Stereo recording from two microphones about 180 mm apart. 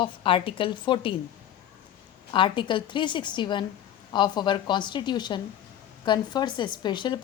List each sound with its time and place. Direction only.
0.0 s a woman's voice: 30° left (ahead or behind)
2.3 s a woman's voice: 25° left (ahead or behind)